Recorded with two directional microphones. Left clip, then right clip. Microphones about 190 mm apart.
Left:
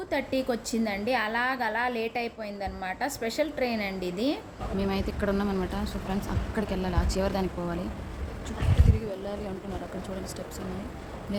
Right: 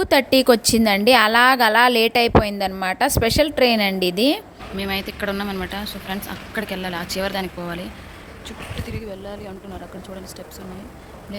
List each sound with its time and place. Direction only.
0.0 s a woman's voice: 55° right (ahead or behind)
4.8 s speech: centre (ahead or behind)